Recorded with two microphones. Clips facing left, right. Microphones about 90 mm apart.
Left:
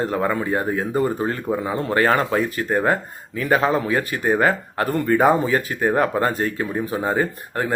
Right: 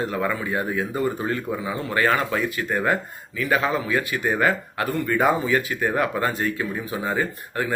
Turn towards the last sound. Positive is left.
turn(degrees=35)  # may be behind; listen again after turning